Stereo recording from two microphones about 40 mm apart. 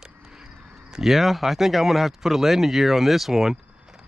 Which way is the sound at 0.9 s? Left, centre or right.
Centre.